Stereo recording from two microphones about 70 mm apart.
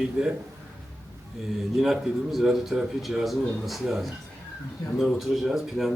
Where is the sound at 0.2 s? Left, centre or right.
Centre.